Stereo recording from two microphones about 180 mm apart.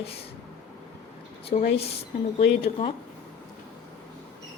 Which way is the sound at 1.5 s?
40° left (ahead or behind).